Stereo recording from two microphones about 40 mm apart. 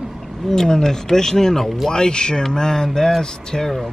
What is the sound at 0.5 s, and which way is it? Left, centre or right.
Speech, centre.